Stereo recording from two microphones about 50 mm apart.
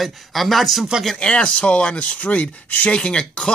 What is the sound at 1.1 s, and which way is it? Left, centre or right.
Speech, left.